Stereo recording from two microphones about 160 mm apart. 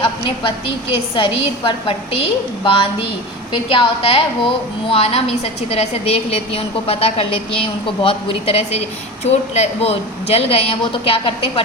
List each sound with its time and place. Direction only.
0.0 s a woman's voice: 30° left (ahead or behind)
3.5 s a woman's voice: 35° left (ahead or behind)